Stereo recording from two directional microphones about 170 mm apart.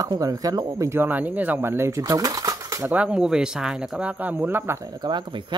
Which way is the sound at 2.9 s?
5° right (ahead or behind).